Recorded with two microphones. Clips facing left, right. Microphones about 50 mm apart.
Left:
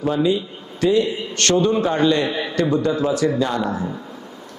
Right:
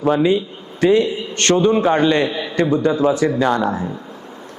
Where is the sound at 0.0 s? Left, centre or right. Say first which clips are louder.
Right 4 dB; right.